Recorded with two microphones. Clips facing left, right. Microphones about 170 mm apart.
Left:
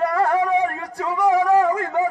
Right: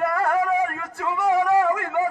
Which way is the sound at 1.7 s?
35° left (ahead or behind).